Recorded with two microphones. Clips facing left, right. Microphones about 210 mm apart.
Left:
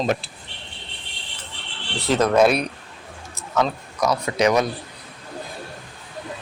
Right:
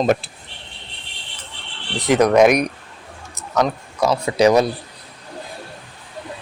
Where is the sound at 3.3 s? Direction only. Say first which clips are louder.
Right 3 dB; 20° right (ahead or behind).